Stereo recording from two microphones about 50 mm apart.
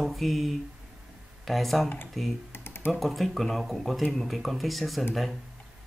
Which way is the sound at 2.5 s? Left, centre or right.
Left.